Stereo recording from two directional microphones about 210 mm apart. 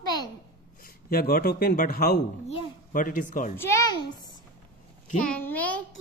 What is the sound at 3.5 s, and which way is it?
Speech, 15° left (ahead or behind).